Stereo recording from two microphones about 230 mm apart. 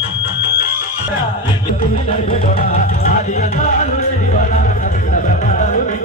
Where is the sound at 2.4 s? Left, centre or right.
Left.